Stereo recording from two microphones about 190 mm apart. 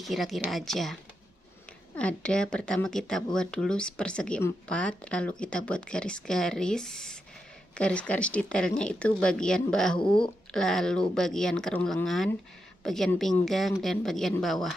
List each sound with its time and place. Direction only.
0.0 s speech: centre (ahead or behind)
2.0 s speech: 5° left (ahead or behind)
9.9 s speech: 25° left (ahead or behind)
10.5 s speech: centre (ahead or behind)